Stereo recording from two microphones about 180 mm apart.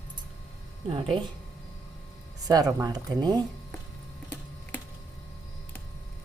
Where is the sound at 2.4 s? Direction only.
20° right (ahead or behind).